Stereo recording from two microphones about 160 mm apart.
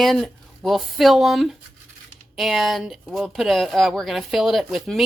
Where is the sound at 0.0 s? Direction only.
Centre (ahead or behind).